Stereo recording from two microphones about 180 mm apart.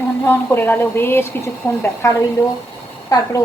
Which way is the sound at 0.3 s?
10° left (ahead or behind).